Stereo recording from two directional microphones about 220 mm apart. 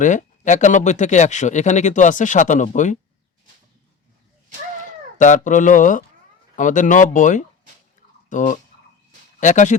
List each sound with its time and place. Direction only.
0.0 s speech: 35° left (ahead or behind)
4.8 s speech: 35° left (ahead or behind)